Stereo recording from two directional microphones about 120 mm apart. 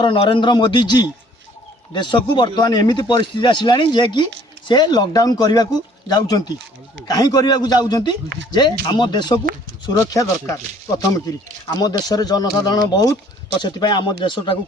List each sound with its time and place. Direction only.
0.0 s a man's voice: 45° left (ahead or behind)